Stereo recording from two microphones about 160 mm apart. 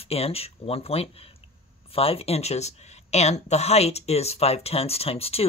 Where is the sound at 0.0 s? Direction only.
40° left (ahead or behind).